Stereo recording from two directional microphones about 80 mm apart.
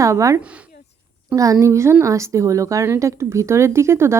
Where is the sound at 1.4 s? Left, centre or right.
Right.